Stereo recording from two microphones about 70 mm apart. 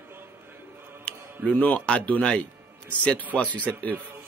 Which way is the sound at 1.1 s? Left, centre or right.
Centre.